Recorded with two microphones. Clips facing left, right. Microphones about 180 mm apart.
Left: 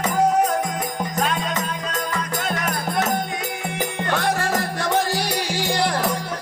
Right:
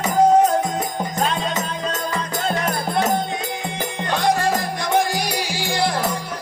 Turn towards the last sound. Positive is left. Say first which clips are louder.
# even
turn(degrees=-10)  # may be behind; listen again after turning